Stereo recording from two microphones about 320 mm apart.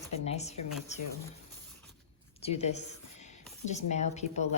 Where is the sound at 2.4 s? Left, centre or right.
Centre.